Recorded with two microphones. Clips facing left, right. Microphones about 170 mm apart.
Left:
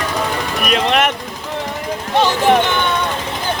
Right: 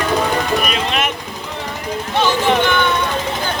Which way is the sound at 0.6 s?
65° left (ahead or behind).